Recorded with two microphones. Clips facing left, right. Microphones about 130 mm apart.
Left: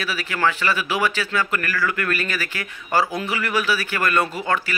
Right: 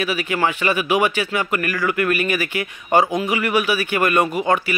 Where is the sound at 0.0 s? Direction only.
15° right (ahead or behind).